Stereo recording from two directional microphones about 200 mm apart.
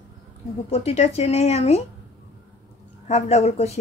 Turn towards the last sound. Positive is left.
turn(degrees=30)  # may be behind; listen again after turning